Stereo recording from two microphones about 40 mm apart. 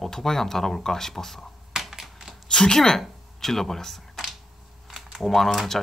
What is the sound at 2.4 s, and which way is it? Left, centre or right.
A woman's voice, centre.